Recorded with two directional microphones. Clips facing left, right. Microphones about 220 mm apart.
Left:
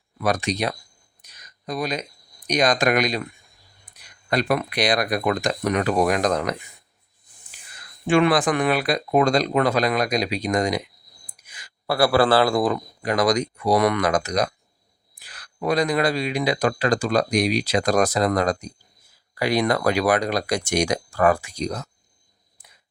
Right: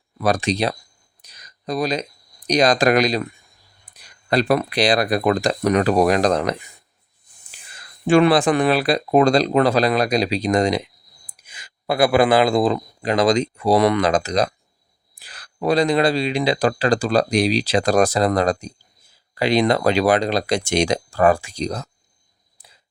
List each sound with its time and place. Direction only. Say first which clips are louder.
0.2 s speech: right 3 dB; 30° right (ahead or behind)
1.2 s a sound: right 4 dB; 35° right (ahead or behind)
2.5 s speech: right 4 dB; 35° right (ahead or behind)
4.3 s speech: right 4 dB; 35° right (ahead or behind)
8.0 s speech: right 4 dB; 35° right (ahead or behind)